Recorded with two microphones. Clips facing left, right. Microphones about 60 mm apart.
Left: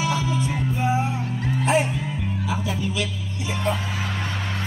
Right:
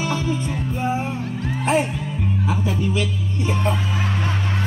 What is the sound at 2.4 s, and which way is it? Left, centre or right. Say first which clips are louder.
Speech: right 3 dB; right.